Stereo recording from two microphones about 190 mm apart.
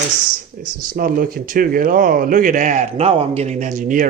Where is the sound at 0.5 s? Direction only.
45° right (ahead or behind).